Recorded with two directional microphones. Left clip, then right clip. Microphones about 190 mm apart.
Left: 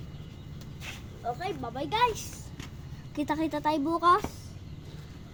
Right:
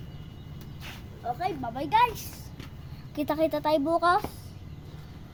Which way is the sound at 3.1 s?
25° right (ahead or behind).